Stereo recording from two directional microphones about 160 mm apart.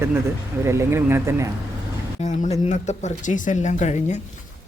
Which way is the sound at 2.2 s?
50° left (ahead or behind).